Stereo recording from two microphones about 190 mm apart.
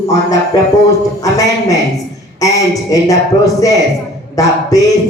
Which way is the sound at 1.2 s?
15° left (ahead or behind).